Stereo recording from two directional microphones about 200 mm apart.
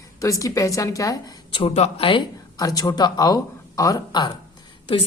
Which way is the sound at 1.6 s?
30° left (ahead or behind).